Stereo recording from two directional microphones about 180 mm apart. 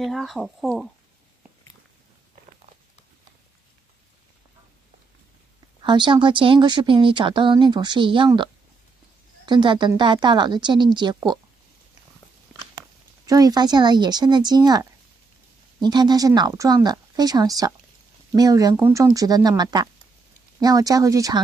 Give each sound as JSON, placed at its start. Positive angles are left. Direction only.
{"t": 0.0, "sound": "speech", "side_deg": 0}
{"t": 5.8, "sound": "speech", "side_deg": -25}
{"t": 9.5, "sound": "speech", "side_deg": -25}
{"t": 13.3, "sound": "speech", "side_deg": -20}